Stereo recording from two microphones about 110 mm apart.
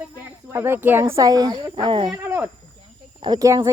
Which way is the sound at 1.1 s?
35° right (ahead or behind).